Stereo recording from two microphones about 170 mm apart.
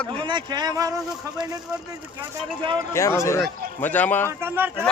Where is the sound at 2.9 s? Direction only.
15° left (ahead or behind).